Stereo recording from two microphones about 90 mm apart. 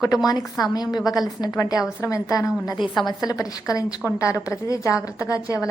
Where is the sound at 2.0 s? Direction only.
35° left (ahead or behind).